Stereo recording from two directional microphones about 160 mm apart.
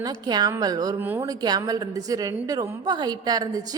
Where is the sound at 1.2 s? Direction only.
25° right (ahead or behind).